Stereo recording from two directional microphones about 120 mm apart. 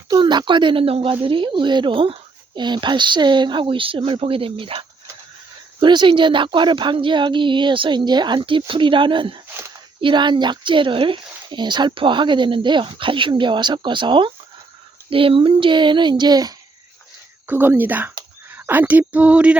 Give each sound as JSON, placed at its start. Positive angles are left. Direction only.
{"t": 0.1, "sound": "speech", "side_deg": -40}
{"t": 17.4, "sound": "speech", "side_deg": -15}